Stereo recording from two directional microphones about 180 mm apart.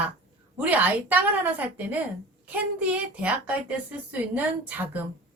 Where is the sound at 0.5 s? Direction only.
10° right (ahead or behind).